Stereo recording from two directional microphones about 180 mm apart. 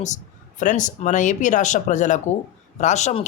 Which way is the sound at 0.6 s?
45° left (ahead or behind).